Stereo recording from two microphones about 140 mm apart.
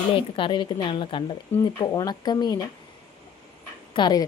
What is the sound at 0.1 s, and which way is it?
A woman's voice, 40° left (ahead or behind).